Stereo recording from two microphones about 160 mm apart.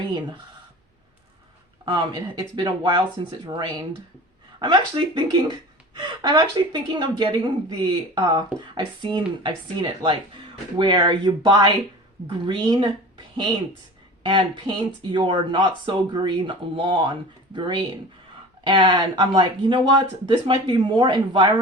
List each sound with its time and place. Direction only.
1.8 s speech: 30° right (ahead or behind)